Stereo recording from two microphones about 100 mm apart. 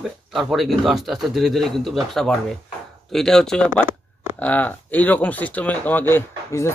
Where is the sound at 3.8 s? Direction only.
25° right (ahead or behind).